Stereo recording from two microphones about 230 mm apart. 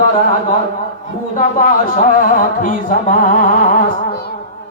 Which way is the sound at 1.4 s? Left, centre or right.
Left.